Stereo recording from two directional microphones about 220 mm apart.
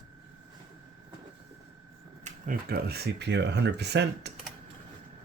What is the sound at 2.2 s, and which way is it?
Speech, 40° right (ahead or behind).